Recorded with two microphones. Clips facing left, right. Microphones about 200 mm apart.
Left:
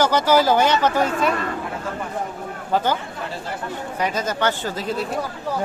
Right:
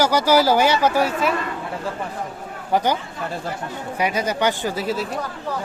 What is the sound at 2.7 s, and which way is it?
Speech, 15° right (ahead or behind).